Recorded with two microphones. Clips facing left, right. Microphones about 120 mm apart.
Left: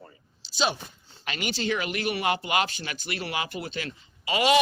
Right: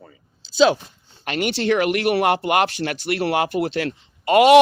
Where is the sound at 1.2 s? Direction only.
55° right (ahead or behind).